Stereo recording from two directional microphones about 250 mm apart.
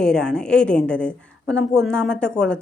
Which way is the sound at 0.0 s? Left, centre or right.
Centre.